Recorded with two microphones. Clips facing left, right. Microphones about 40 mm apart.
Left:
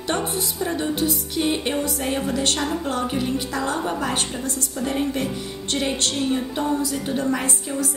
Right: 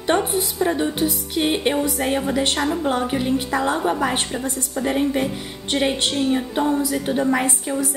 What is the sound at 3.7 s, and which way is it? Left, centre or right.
Speech, centre.